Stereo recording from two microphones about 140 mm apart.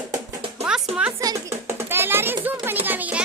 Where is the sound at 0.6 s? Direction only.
Centre (ahead or behind).